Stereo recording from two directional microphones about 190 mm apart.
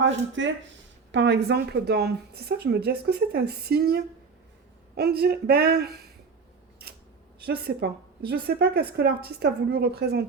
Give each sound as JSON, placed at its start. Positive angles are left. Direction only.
{"t": 0.0, "sound": "a woman's voice", "side_deg": -75}
{"t": 6.8, "sound": "scissors", "side_deg": -55}
{"t": 7.4, "sound": "a woman's voice", "side_deg": -60}